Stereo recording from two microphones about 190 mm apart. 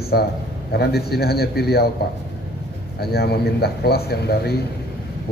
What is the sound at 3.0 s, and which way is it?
A man's voice, 55° left (ahead or behind).